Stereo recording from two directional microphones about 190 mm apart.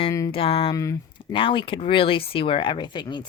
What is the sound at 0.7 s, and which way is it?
Speech, 15° left (ahead or behind).